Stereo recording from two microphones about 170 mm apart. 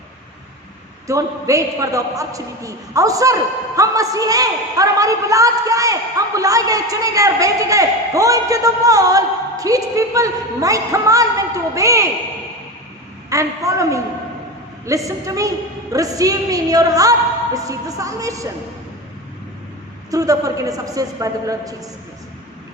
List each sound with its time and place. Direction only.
1.0 s a man's voice: 20° right (ahead or behind)
13.3 s a woman's voice: 20° right (ahead or behind)
20.1 s a man's voice: 20° right (ahead or behind)